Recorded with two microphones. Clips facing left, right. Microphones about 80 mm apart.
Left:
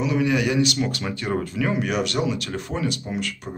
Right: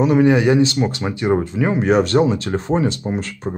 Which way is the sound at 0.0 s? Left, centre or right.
Right.